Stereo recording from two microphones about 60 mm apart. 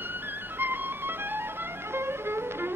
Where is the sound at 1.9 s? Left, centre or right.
Right.